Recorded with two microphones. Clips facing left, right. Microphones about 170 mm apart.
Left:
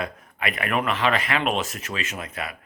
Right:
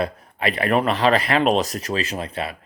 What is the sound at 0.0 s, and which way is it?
Speech, 35° right (ahead or behind).